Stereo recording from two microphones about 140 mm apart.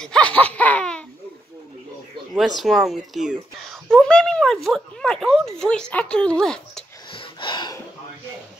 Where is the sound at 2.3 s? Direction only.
Centre (ahead or behind).